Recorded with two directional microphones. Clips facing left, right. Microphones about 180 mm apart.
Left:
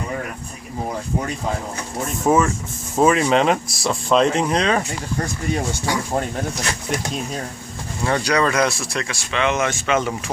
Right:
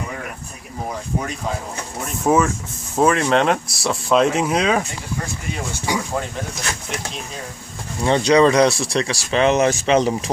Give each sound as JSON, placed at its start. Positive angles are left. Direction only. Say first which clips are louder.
{"t": 2.2, "sound": "speech", "louder": "even", "side_deg": 0}
{"t": 8.0, "sound": "speech", "louder": "right 5 dB", "side_deg": -25}